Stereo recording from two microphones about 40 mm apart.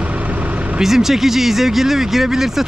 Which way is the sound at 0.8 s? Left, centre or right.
Centre.